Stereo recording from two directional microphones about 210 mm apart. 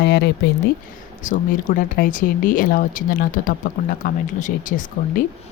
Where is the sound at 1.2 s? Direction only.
40° left (ahead or behind).